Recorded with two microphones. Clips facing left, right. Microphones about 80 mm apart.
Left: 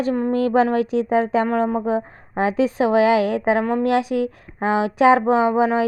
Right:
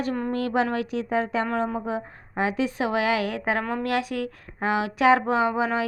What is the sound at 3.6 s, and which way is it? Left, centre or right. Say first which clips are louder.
A woman's voice: left 7 dB; centre.